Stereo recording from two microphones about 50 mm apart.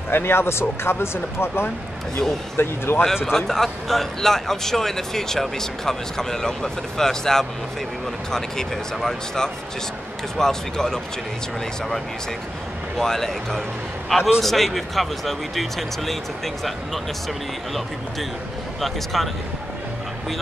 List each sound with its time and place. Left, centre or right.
0.1 s speech: left
3.3 s speech: centre
12.9 s a man's voice: centre
19.1 s speech: centre